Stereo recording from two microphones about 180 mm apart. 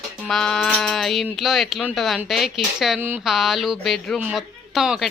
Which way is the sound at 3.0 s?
10° right (ahead or behind).